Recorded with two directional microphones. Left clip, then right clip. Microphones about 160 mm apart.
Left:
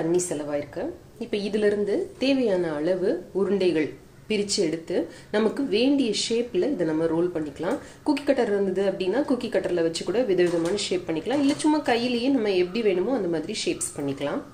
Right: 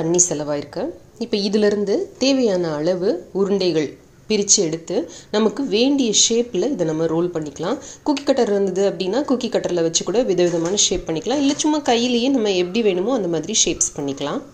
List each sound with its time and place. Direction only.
0.3 s a woman's voice: 50° right (ahead or behind)